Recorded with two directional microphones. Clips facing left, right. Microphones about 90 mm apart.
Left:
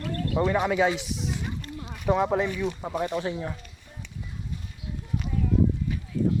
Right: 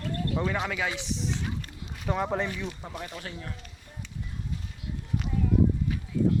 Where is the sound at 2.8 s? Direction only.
25° left (ahead or behind).